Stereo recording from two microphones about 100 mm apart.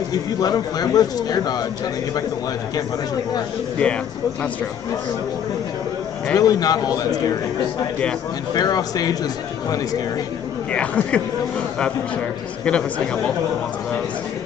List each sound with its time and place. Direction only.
0.1 s a man's voice: 40° left (ahead or behind)
3.8 s speech: 10° left (ahead or behind)
6.3 s a man's voice: 40° left (ahead or behind)
8.5 s a man's voice: 40° left (ahead or behind)
10.7 s speech: 10° left (ahead or behind)
12.6 s speech: 10° left (ahead or behind)